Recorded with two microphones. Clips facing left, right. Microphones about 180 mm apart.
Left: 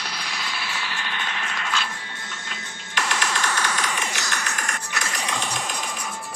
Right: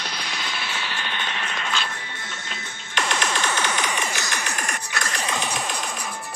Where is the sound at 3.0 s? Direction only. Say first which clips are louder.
Right 1 dB; 25° right (ahead or behind).